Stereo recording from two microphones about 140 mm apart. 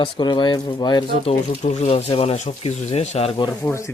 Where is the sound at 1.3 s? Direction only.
50° left (ahead or behind).